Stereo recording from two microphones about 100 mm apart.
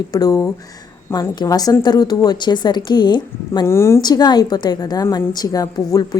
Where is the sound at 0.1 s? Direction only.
40° left (ahead or behind).